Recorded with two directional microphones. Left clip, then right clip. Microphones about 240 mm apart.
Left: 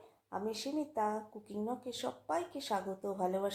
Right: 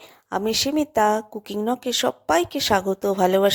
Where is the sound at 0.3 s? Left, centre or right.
Right.